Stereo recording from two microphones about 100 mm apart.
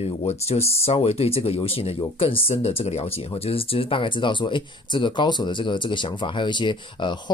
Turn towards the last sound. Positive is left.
turn(degrees=50)  # may be behind; listen again after turning